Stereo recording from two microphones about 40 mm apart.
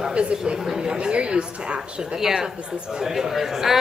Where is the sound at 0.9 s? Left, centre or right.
Right.